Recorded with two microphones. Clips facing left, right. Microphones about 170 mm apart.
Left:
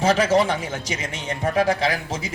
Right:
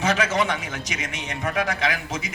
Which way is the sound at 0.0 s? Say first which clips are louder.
Left 5 dB; 30° left (ahead or behind).